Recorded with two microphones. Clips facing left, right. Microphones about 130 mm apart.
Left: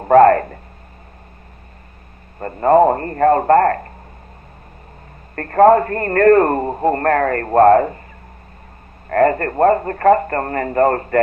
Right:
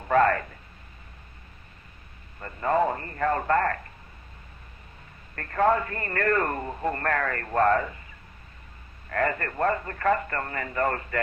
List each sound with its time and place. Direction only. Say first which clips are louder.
0.0 s speech: left 12 dB; 45° left (ahead or behind)
2.4 s a man's voice: left 12 dB; 45° left (ahead or behind)
5.3 s a man's voice: left 12 dB; 45° left (ahead or behind)
9.0 s a man's voice: left 12 dB; 45° left (ahead or behind)